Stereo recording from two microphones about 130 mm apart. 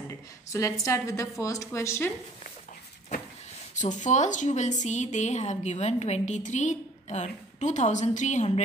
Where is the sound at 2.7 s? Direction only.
90° left.